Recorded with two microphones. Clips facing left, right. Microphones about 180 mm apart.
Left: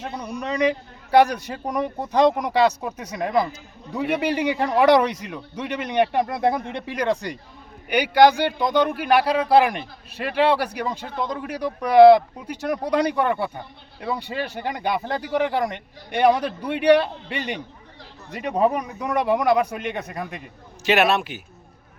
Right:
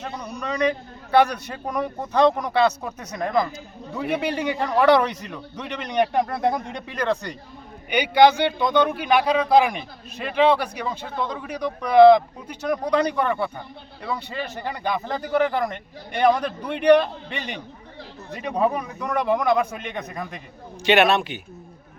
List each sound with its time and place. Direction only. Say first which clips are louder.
0.2 s a man's voice: left 2 dB; 10° left (ahead or behind)